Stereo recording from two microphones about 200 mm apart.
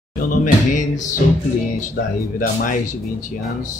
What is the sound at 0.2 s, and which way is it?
Speech, 40° left (ahead or behind).